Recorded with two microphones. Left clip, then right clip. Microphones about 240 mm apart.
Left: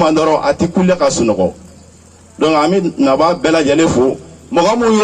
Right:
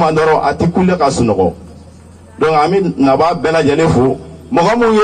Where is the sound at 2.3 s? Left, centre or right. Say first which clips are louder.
Right 1 dB; left.